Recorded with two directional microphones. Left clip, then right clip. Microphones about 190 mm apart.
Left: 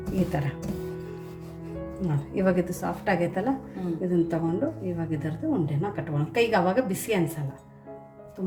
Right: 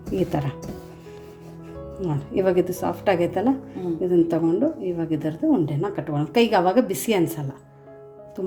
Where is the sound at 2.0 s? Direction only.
30° right (ahead or behind).